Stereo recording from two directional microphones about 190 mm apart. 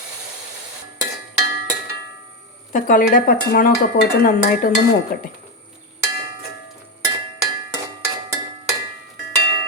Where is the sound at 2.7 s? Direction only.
45° left (ahead or behind).